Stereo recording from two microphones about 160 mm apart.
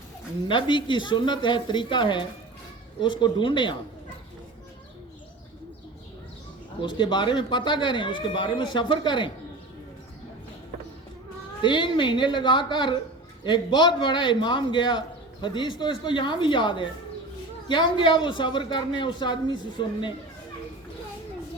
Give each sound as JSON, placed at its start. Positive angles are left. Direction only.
{"t": 0.4, "sound": "a man's voice", "side_deg": 30}
{"t": 6.8, "sound": "speech", "side_deg": 30}
{"t": 11.6, "sound": "a man's voice", "side_deg": 30}